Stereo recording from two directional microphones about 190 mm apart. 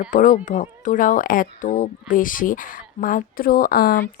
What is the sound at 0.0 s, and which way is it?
Speech, 45° left (ahead or behind).